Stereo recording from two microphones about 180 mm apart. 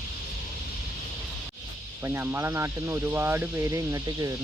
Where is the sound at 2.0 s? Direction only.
10° right (ahead or behind).